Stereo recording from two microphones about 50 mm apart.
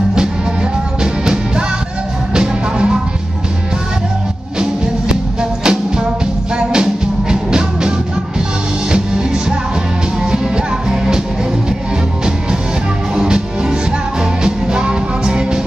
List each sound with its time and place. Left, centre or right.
2.3 s music: centre
4.6 s music: centre
8.9 s music: centre
13.1 s music: centre